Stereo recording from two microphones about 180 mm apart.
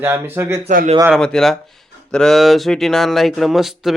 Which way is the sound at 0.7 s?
45° right (ahead or behind).